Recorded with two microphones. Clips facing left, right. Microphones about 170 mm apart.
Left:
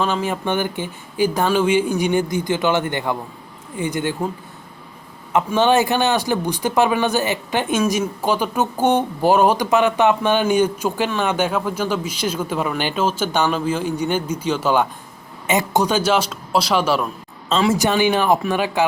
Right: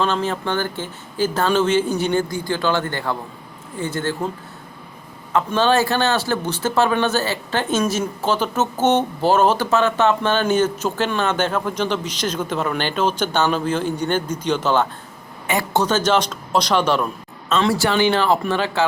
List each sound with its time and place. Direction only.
0.0 s speech: 10° left (ahead or behind)
5.3 s speech: 15° left (ahead or behind)
17.7 s speech: 20° left (ahead or behind)